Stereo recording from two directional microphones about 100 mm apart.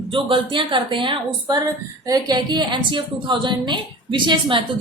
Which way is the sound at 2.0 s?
40° right (ahead or behind).